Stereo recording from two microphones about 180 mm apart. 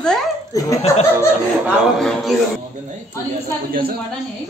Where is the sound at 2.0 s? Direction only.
Centre (ahead or behind).